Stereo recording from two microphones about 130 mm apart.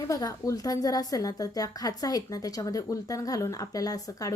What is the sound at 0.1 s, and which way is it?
A woman's voice, 25° left (ahead or behind).